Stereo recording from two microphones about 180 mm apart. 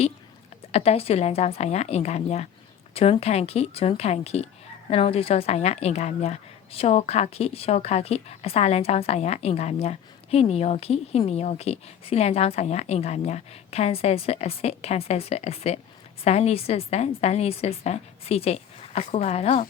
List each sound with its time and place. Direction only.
0.7 s a woman's voice: 35° left (ahead or behind)